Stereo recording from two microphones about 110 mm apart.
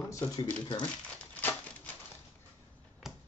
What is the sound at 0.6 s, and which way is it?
Speech, 45° left (ahead or behind).